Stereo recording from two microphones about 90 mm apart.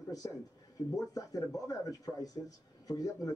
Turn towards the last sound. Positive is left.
turn(degrees=45)  # may be behind; listen again after turning